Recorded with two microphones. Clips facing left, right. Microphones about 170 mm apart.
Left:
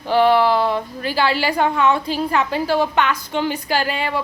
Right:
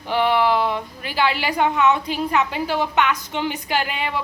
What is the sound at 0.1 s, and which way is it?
A woman's voice, 15° right (ahead or behind).